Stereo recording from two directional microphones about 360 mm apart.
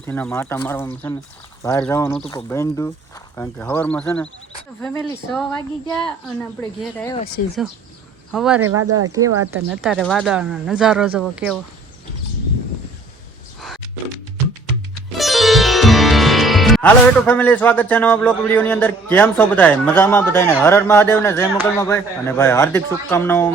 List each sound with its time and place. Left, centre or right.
0.0 s speech: centre
7.4 s speech: left
8.3 s speech: centre
8.8 s speech: right
9.6 s speech: centre
15.2 s speech: centre